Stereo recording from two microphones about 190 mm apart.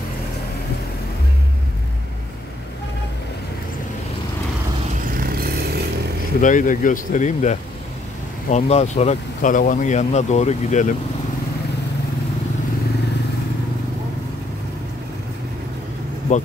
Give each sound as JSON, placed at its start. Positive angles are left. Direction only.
{"t": 5.1, "sound": "vehicle", "side_deg": -50}
{"t": 6.4, "sound": "speech", "side_deg": 45}
{"t": 16.3, "sound": "speech", "side_deg": 40}